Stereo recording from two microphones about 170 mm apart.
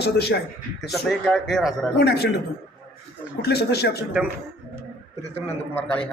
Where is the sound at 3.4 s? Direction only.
70° left (ahead or behind).